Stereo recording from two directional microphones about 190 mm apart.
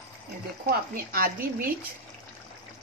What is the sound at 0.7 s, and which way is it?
A woman's voice, 50° right (ahead or behind).